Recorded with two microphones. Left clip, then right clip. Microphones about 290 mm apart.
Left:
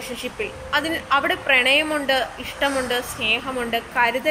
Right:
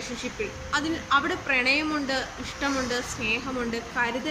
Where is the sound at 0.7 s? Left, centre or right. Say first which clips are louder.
Left 4 dB; centre.